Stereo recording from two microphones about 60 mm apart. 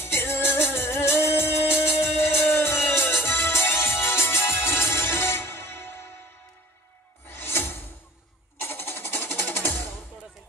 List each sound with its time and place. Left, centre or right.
0.0 s music: left
7.2 s music: left